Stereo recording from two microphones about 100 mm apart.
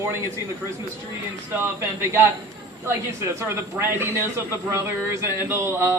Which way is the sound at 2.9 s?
25° right (ahead or behind).